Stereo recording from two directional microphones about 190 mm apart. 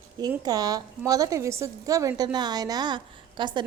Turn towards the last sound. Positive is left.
turn(degrees=-25)  # may be behind; listen again after turning